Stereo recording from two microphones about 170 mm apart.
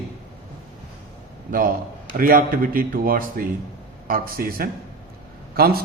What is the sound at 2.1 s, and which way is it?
A man's voice, 55° right (ahead or behind).